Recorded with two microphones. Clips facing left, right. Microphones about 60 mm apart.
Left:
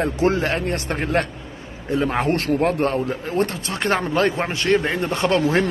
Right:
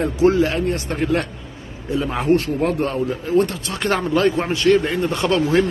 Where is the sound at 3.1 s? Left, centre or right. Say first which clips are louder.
Right 4 dB; left.